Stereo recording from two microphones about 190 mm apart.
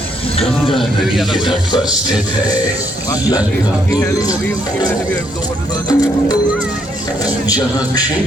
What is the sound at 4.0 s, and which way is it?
Speech, 20° left (ahead or behind).